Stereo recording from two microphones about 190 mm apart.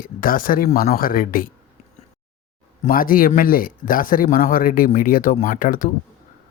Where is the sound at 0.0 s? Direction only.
45° left (ahead or behind).